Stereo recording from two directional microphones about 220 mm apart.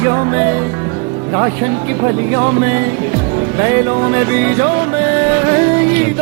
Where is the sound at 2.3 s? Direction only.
25° right (ahead or behind).